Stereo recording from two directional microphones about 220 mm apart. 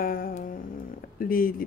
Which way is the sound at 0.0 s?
40° left (ahead or behind).